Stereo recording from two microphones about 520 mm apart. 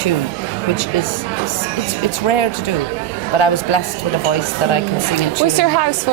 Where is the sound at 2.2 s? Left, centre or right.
Left.